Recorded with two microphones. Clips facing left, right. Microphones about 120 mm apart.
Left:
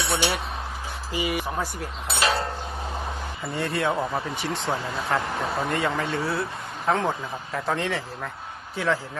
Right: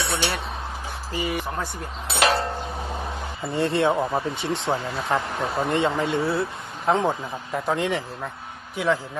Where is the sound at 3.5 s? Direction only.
25° right (ahead or behind).